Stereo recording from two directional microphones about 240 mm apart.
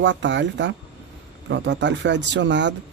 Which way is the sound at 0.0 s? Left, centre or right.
Right.